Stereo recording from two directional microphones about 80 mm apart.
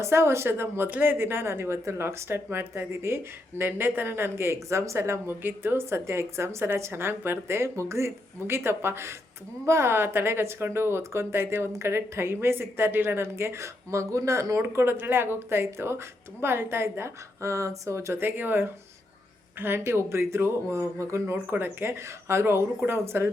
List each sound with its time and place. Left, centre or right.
0.0 s a woman's voice: right
21.3 s a woman's voice: right